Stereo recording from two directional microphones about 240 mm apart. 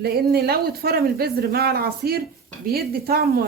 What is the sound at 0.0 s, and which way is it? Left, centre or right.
Speech, right.